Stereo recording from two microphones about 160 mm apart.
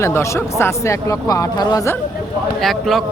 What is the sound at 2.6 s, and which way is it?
Speech, centre (ahead or behind).